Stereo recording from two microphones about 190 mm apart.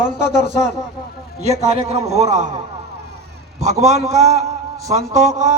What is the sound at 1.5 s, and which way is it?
A man's voice, 35° right (ahead or behind).